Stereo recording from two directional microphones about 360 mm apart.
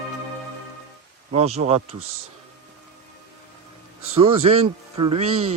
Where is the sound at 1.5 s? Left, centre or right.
Centre.